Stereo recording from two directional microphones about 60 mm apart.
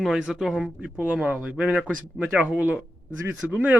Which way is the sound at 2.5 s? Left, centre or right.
Right.